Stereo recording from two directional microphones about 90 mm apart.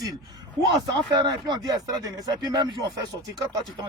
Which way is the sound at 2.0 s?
45° right (ahead or behind).